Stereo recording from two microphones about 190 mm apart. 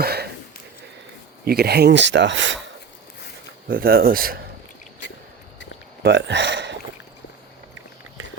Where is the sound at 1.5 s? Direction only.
55° right (ahead or behind); by 2.6 s 75° right (ahead or behind).